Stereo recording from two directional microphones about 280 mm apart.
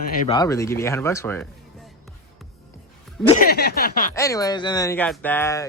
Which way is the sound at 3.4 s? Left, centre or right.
Left.